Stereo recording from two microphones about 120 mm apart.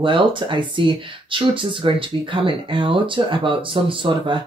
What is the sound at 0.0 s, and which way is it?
Speech, 45° right (ahead or behind).